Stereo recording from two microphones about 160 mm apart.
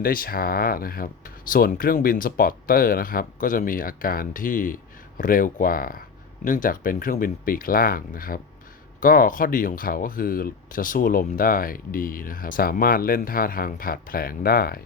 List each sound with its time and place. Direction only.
0.0 s speech: 65° left (ahead or behind)